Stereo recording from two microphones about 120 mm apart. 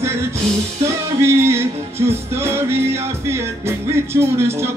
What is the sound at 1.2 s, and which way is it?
Music, 20° right (ahead or behind).